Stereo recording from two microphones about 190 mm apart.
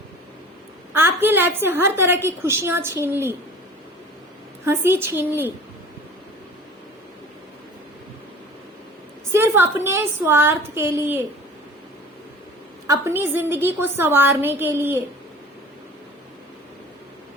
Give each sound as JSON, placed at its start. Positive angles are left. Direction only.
{"t": 0.9, "sound": "a woman's voice", "side_deg": -10}
{"t": 4.6, "sound": "a woman's voice", "side_deg": -10}
{"t": 9.3, "sound": "a woman's voice", "side_deg": -10}
{"t": 12.9, "sound": "a woman's voice", "side_deg": -10}